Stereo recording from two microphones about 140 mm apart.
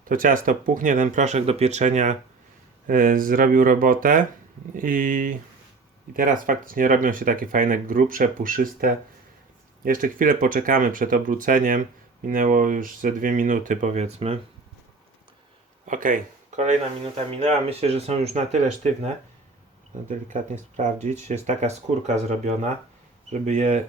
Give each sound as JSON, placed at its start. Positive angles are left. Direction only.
{"t": 0.0, "sound": "speech", "side_deg": -80}
{"t": 2.8, "sound": "speech", "side_deg": -75}
{"t": 15.9, "sound": "speech", "side_deg": -70}
{"t": 17.2, "sound": "speech", "side_deg": -45}